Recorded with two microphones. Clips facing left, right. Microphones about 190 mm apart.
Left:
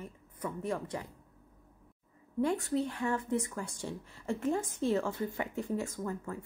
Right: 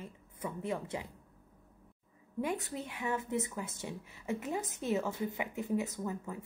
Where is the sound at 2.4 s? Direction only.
20° right (ahead or behind).